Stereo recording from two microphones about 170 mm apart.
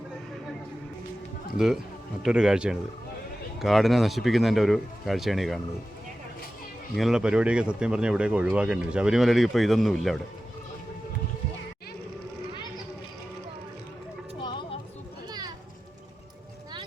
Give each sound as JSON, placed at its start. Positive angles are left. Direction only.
{"t": 1.5, "sound": "speech", "side_deg": 0}
{"t": 6.9, "sound": "speech", "side_deg": 0}
{"t": 14.3, "sound": "a sound", "side_deg": 30}
{"t": 15.3, "sound": "children playing", "side_deg": -25}